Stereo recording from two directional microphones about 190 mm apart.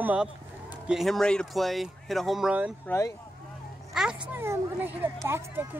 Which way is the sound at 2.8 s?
15° left (ahead or behind).